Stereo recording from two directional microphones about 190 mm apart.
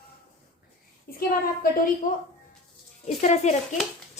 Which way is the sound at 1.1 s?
50° left (ahead or behind).